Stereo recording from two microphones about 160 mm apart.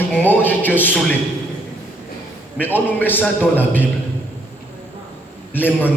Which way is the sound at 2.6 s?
10° left (ahead or behind).